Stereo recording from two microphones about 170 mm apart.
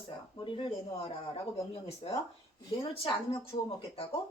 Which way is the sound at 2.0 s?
35° left (ahead or behind).